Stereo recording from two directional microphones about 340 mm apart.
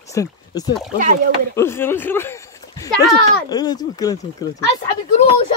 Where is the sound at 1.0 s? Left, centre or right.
Right.